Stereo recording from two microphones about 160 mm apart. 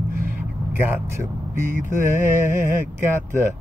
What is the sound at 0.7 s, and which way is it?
Mantra, 15° right (ahead or behind).